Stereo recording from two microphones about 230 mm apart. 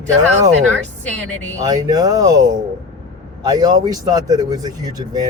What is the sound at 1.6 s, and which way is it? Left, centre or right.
Speech, centre.